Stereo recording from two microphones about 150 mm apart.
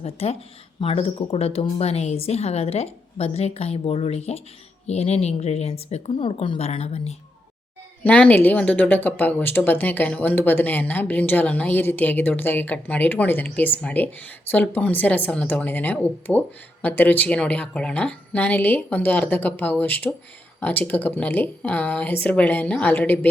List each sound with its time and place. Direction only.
0.0 s a woman's voice: 40° left (ahead or behind)
8.0 s speech: 10° left (ahead or behind)